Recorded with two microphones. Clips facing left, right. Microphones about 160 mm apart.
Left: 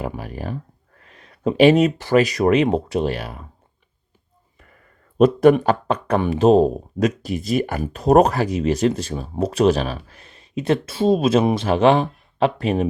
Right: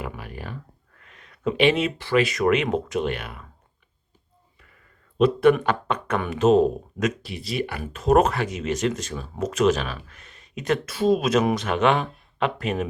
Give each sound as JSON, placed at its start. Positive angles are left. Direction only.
{"t": 0.0, "sound": "speech", "side_deg": 35}
{"t": 4.6, "sound": "speech", "side_deg": 45}